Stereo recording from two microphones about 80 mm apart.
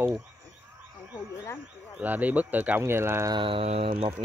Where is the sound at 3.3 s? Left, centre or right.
Right.